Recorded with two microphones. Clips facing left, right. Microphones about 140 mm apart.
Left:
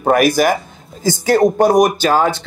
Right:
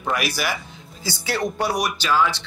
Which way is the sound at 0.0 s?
50° left (ahead or behind).